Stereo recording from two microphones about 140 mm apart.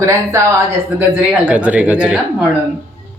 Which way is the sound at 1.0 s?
10° right (ahead or behind).